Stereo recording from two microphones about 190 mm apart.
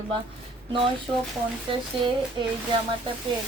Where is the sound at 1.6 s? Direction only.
25° right (ahead or behind).